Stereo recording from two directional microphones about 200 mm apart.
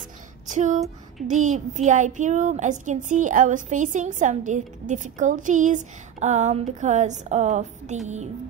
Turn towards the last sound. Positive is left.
turn(degrees=-35)  # may be behind; listen again after turning